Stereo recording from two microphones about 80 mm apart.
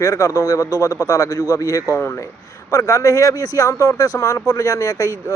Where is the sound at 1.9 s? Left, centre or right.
Left.